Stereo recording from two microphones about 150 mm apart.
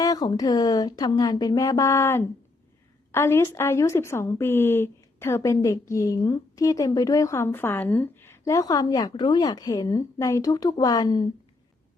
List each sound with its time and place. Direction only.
0.0 s a woman's voice: 25° left (ahead or behind)